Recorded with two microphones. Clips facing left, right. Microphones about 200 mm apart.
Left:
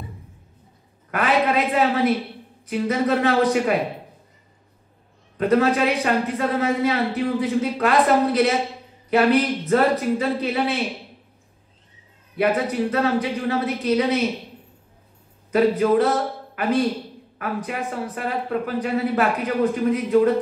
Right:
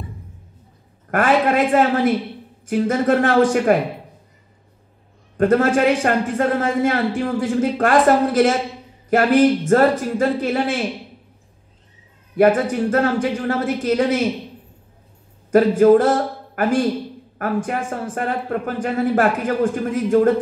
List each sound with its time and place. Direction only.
1.1 s a man's voice: 50° right (ahead or behind)
5.4 s a man's voice: 50° right (ahead or behind)
12.4 s a man's voice: 50° right (ahead or behind)
15.5 s a man's voice: 45° right (ahead or behind)